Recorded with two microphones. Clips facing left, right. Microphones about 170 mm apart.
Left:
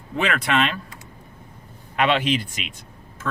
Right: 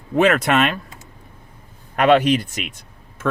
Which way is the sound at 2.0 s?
45° right (ahead or behind).